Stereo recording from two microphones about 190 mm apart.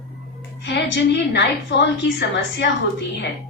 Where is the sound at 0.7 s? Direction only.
65° left (ahead or behind).